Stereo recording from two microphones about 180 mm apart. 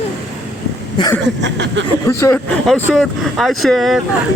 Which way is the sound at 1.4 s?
80° right.